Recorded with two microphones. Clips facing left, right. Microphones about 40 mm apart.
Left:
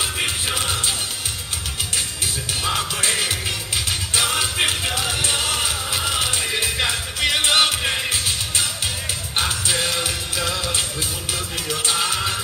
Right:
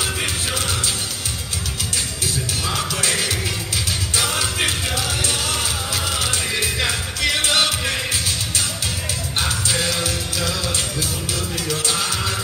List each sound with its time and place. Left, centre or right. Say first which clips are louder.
0.0 s music: even; centre
2.6 s music: left 2 dB; left
9.4 s music: even; left
11.7 s music: left 2 dB; left